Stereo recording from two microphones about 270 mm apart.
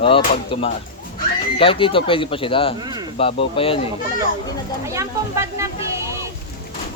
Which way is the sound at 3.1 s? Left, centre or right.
Left.